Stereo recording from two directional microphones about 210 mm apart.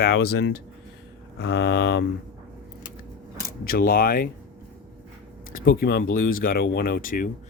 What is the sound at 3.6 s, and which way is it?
Speech, 45° left (ahead or behind).